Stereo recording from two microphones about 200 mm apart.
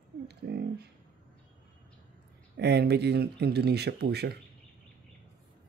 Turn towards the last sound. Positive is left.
turn(degrees=-55)  # may be behind; listen again after turning